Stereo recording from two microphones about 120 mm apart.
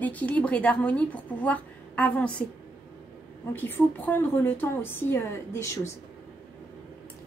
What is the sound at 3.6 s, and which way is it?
Speech, 15° left (ahead or behind).